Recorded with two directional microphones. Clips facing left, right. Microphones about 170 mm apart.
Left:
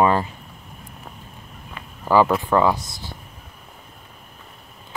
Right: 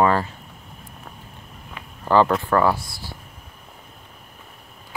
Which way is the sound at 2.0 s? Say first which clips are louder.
Even; 5° left (ahead or behind).